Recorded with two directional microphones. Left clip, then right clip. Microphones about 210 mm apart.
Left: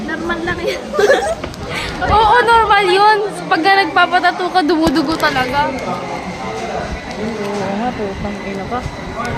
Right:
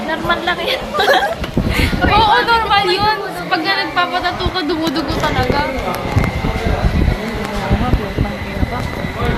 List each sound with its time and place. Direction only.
0.3 s a woman's voice: 20° right (ahead or behind)
2.1 s speech: 35° left (ahead or behind)